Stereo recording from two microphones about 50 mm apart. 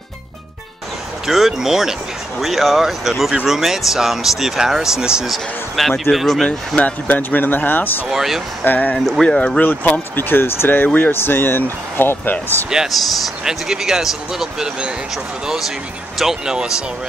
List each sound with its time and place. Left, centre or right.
1.2 s speech: centre
5.2 s speech: centre
6.8 s speech: left
8.1 s speech: centre
8.6 s speech: left
9.2 s speech: centre
9.6 s speech: left
12.6 s speech: centre
16.2 s speech: centre